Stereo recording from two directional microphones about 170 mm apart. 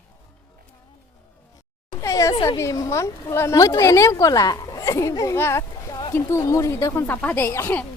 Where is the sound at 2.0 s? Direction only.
20° left (ahead or behind).